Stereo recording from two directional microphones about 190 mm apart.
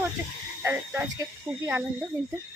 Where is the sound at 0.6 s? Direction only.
10° right (ahead or behind).